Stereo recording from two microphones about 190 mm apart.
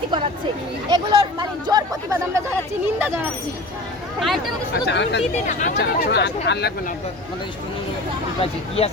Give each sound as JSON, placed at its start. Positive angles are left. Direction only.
{"t": 0.9, "sound": "speech", "side_deg": -25}
{"t": 4.2, "sound": "speech", "side_deg": 0}
{"t": 4.9, "sound": "speech", "side_deg": 65}
{"t": 5.5, "sound": "speech", "side_deg": 40}
{"t": 5.7, "sound": "speech", "side_deg": 60}
{"t": 8.4, "sound": "speech", "side_deg": 30}